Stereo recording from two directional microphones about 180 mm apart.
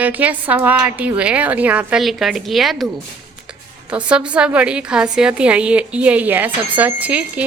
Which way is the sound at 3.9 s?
5° right (ahead or behind).